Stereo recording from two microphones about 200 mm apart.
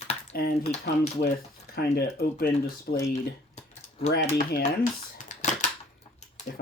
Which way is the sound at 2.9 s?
50° left (ahead or behind).